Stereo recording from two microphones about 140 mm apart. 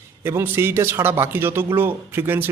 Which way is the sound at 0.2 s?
15° right (ahead or behind).